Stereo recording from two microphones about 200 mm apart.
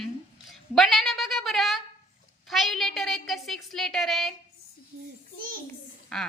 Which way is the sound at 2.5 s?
Centre (ahead or behind).